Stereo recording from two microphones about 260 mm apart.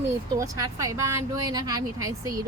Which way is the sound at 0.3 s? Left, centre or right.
Centre.